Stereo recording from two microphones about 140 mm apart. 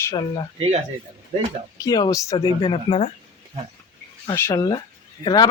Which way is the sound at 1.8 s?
25° left (ahead or behind).